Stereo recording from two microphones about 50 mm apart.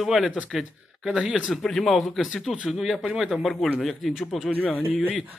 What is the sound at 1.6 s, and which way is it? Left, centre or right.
Speech, centre.